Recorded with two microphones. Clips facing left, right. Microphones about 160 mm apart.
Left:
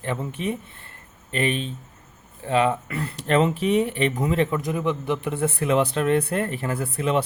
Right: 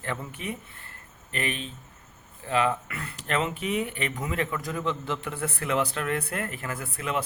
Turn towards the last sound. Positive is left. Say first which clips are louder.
# left 7 dB
turn(degrees=30)  # may be behind; listen again after turning